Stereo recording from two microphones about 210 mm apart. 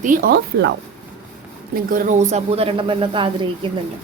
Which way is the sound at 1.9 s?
35° right (ahead or behind).